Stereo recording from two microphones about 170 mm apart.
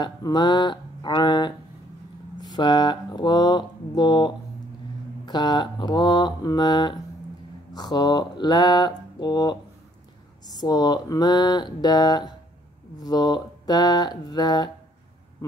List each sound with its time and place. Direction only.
0.0 s mantra: 25° left (ahead or behind)